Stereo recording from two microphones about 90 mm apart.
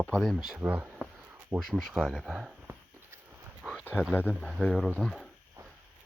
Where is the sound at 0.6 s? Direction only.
20° right (ahead or behind).